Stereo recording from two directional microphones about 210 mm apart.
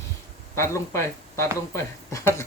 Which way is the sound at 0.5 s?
10° left (ahead or behind).